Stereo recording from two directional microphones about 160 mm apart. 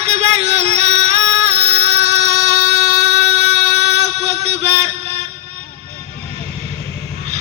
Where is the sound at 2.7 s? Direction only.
40° right (ahead or behind).